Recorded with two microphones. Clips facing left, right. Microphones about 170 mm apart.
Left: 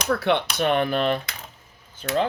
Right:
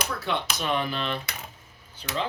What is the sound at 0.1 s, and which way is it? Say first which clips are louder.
Speech: left 8 dB; 65° left (ahead or behind).